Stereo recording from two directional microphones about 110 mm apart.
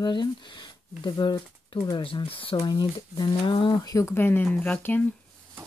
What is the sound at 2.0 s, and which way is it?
Speech, 55° left (ahead or behind).